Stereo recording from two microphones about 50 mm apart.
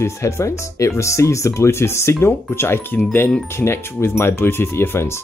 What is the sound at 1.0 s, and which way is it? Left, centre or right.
Speech, left.